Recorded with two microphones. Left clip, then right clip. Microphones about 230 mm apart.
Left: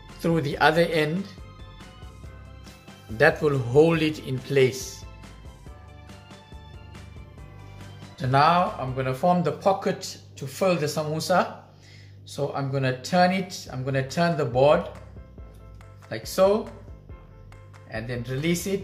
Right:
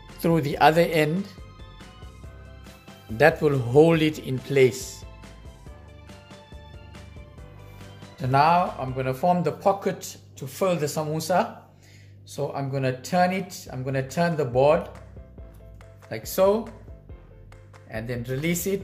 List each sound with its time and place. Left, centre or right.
0.2 s speech: right
2.6 s music: centre
3.2 s speech: right
8.2 s speech: right
8.5 s speech: centre
8.9 s speech: right
16.1 s speech: right
17.8 s speech: right